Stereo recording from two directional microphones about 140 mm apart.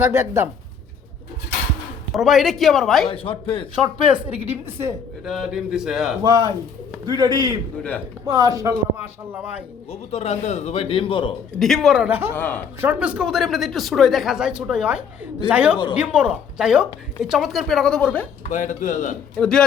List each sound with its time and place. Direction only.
0.0 s speech: 20° right (ahead or behind)
2.1 s speech: centre (ahead or behind)
3.1 s a man's voice: 40° left (ahead or behind)
4.1 s a woman's voice: 10° right (ahead or behind)
5.2 s speech: 5° right (ahead or behind)
6.2 s a man's voice: 30° right (ahead or behind)
7.8 s speech: 10° left (ahead or behind)
8.3 s speech: 25° right (ahead or behind)
9.9 s a man's voice: 50° left (ahead or behind)
11.6 s speech: centre (ahead or behind)
12.3 s speech: 10° left (ahead or behind)
12.8 s a woman's voice: 10° right (ahead or behind); by 18.3 s 5° left (ahead or behind)
18.4 s speech: 65° left (ahead or behind)
19.4 s speech: 5° left (ahead or behind)